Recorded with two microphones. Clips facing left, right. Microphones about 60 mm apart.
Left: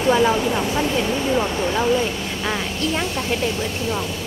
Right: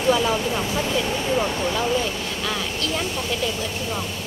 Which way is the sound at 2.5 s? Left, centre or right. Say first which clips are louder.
Left 4 dB; left.